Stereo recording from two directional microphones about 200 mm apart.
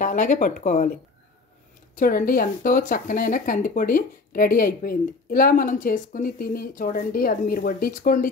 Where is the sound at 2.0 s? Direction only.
45° left (ahead or behind).